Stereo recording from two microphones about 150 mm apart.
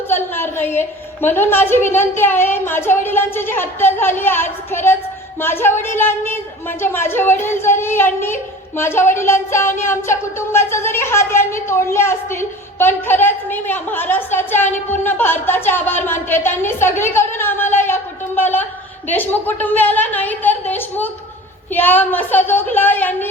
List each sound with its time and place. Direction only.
0.1 s speech: 15° left (ahead or behind)
17.7 s a sound: 15° left (ahead or behind)
19.0 s speech: 15° left (ahead or behind)